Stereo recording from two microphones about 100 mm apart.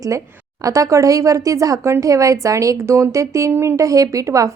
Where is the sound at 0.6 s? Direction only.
35° right (ahead or behind).